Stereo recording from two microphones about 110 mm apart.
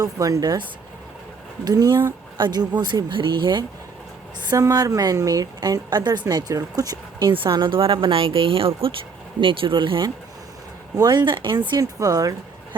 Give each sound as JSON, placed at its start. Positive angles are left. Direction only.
{"t": 0.0, "sound": "a woman's voice", "side_deg": -30}
{"t": 1.6, "sound": "a woman's voice", "side_deg": -35}
{"t": 4.4, "sound": "a woman's voice", "side_deg": -30}
{"t": 11.8, "sound": "a woman's voice", "side_deg": -30}